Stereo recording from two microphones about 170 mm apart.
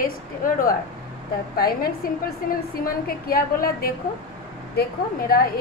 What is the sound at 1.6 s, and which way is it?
A woman's voice, 60° left (ahead or behind).